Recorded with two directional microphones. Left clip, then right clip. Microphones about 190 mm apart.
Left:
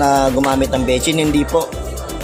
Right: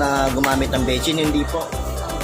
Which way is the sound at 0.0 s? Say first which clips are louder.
Left 5 dB; 30° left (ahead or behind).